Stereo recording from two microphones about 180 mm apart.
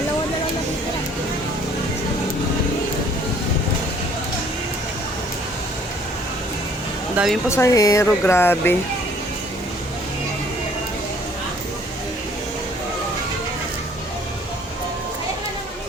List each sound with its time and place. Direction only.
7.2 s speech: 5° right (ahead or behind)
7.5 s speech: 15° left (ahead or behind)